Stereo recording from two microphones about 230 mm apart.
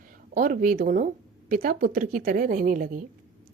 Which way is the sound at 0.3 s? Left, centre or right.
Right.